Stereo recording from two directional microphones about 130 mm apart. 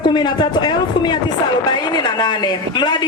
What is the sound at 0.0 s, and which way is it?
Speech, 35° left (ahead or behind).